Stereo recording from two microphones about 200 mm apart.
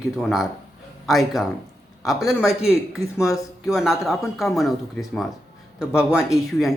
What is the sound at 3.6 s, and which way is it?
Speech, centre (ahead or behind).